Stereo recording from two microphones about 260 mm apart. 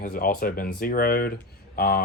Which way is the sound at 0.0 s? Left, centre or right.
Left.